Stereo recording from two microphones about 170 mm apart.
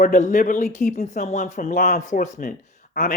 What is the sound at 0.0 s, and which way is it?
Speech, 50° left (ahead or behind).